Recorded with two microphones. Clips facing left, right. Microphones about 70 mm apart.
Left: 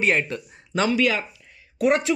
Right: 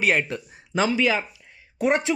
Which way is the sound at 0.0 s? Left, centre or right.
Centre.